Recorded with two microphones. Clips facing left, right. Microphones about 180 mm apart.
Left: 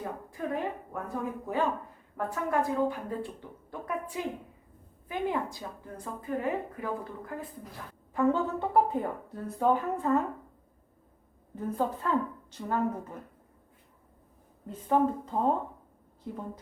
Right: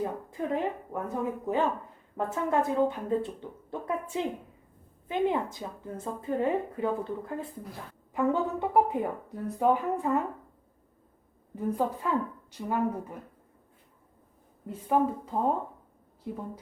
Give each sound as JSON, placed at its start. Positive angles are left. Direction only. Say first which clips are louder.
{"t": 0.0, "sound": "a woman's voice", "louder": "right 4 dB", "side_deg": -20}
{"t": 8.1, "sound": "speech", "louder": "even", "side_deg": -15}
{"t": 11.5, "sound": "speech", "louder": "right 2 dB", "side_deg": -10}
{"t": 14.7, "sound": "speech", "louder": "even", "side_deg": -10}